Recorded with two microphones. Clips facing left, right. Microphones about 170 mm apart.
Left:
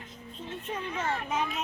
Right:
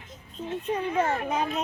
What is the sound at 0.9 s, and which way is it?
Speech, 45° right (ahead or behind).